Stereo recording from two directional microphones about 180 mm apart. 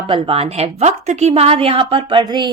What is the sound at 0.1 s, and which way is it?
A woman's voice, 35° right (ahead or behind).